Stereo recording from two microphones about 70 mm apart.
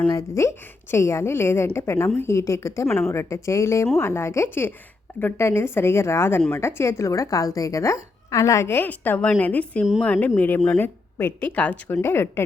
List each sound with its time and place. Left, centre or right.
0.2 s a woman's voice: left
8.7 s a woman's voice: left
12.0 s a woman's voice: left